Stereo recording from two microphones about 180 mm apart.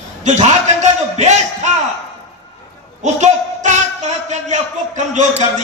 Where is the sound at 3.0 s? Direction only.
40° right (ahead or behind).